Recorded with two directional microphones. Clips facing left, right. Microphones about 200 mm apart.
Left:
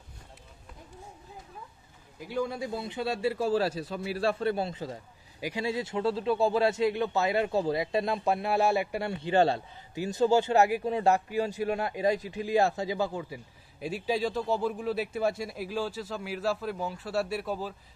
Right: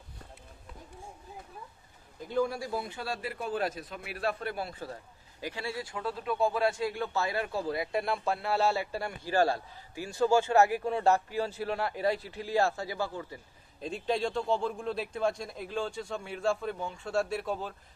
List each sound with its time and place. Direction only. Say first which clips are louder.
2.1 s speech: right 2 dB; 10° left (ahead or behind)
2.4 s a man's voice: even; 20° left (ahead or behind); by 17.7 s 5° left (ahead or behind)